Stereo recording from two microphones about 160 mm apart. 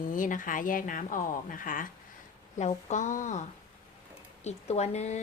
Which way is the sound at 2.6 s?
45° left (ahead or behind).